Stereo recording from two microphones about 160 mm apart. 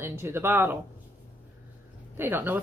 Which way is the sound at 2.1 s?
10° right (ahead or behind).